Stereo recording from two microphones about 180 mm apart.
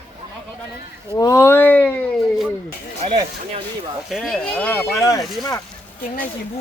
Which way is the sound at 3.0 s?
30° right (ahead or behind).